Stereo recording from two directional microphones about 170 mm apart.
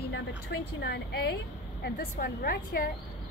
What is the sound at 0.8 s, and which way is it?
A woman's voice, 70° left (ahead or behind).